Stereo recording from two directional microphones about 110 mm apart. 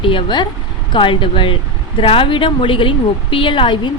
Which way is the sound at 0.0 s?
50° left (ahead or behind).